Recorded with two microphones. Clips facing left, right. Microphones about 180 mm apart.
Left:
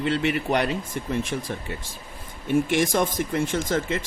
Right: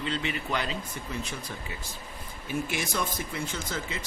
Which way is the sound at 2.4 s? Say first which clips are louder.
Left 10 dB; 50° left (ahead or behind).